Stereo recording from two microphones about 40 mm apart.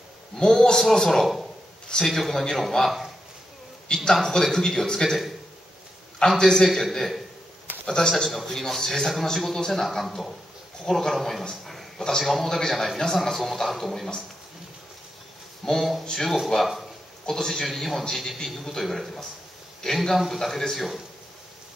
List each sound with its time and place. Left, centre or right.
0.4 s a man's voice: centre
1.2 s speech: centre
2.0 s a man's voice: centre
4.2 s a man's voice: centre
6.1 s a man's voice: centre
7.8 s a man's voice: centre
8.3 s a man's voice: centre
15.6 s speech: centre
17.3 s a man's voice: centre